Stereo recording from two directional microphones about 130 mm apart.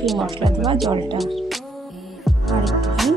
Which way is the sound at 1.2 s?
Centre (ahead or behind).